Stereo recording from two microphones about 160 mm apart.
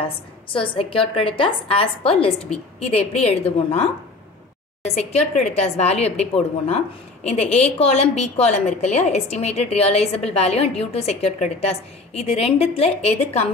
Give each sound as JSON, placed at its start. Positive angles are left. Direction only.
{"t": 0.0, "sound": "a woman's voice", "side_deg": 35}